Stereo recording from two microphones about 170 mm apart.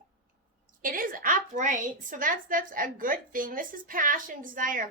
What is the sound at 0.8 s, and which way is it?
A woman's voice, 55° right (ahead or behind).